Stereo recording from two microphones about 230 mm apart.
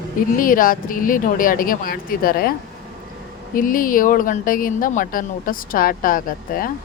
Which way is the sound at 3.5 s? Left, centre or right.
Left.